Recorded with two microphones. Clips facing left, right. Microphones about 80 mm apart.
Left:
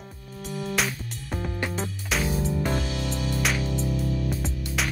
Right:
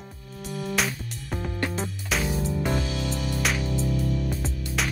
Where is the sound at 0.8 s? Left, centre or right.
Centre.